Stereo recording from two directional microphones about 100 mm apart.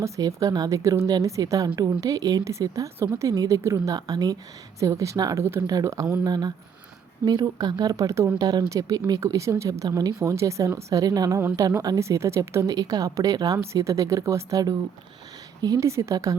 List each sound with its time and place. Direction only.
0.0 s a woman's voice: 35° right (ahead or behind)
5.4 s speech: 25° right (ahead or behind)
5.6 s a woman's voice: 35° right (ahead or behind)
8.4 s a woman's voice: 45° right (ahead or behind)
15.6 s a woman's voice: 40° right (ahead or behind)